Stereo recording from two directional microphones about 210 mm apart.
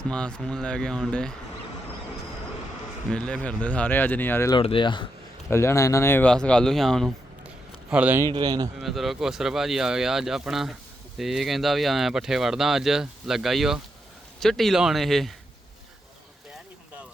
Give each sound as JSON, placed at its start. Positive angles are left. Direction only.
{"t": 0.1, "sound": "speech", "side_deg": 5}
{"t": 3.1, "sound": "speech", "side_deg": 5}
{"t": 4.5, "sound": "speech", "side_deg": 25}
{"t": 8.3, "sound": "a man's voice", "side_deg": -20}
{"t": 8.8, "sound": "speech", "side_deg": 0}